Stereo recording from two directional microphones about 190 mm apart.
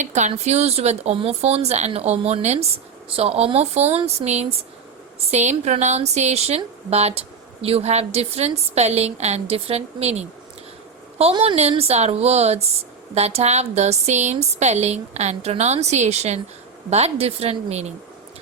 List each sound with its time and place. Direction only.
0.0 s speech: 40° right (ahead or behind)